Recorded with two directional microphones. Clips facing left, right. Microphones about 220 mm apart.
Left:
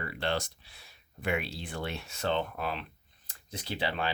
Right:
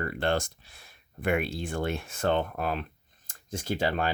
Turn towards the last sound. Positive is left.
turn(degrees=-45)  # may be behind; listen again after turning